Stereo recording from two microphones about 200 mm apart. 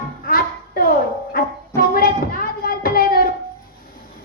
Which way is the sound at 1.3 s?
45° left (ahead or behind).